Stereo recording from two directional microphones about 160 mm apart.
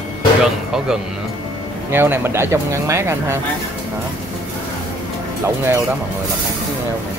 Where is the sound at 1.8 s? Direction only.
15° right (ahead or behind).